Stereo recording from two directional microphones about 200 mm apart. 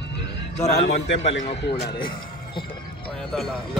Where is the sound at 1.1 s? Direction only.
65° left (ahead or behind).